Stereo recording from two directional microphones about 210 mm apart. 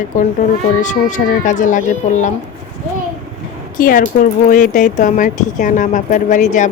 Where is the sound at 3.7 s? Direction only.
40° left (ahead or behind).